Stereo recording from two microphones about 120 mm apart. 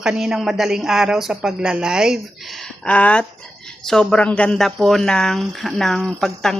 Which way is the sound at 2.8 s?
10° left (ahead or behind).